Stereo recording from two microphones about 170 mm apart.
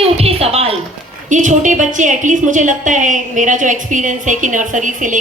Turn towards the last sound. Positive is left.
turn(degrees=-50)  # may be behind; listen again after turning